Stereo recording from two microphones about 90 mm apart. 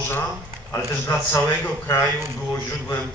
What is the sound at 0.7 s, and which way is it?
A man's voice, 35° left (ahead or behind).